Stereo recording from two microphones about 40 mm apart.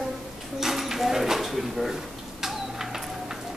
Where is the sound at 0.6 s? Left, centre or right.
Centre.